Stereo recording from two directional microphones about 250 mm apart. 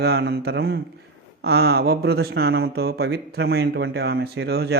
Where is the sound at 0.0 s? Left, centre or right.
Right.